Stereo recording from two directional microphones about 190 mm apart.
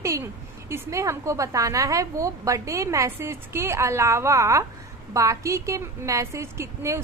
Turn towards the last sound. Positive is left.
turn(degrees=-15)  # may be behind; listen again after turning